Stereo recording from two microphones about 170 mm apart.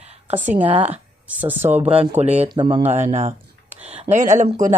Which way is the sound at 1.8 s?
35° right (ahead or behind).